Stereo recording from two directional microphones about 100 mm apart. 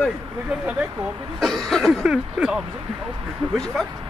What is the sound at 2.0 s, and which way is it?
Speech, 10° right (ahead or behind).